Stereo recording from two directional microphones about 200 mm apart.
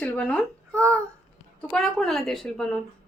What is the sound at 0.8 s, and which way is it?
Child singing, 15° right (ahead or behind).